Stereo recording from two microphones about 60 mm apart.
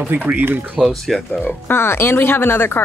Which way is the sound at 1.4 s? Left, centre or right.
Left.